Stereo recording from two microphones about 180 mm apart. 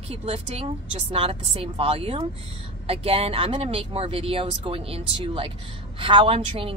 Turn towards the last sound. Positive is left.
turn(degrees=-30)  # may be behind; listen again after turning